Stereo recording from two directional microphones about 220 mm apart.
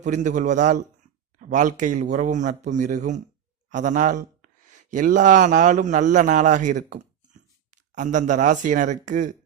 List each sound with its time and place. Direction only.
0.0 s a man's voice: 35° right (ahead or behind)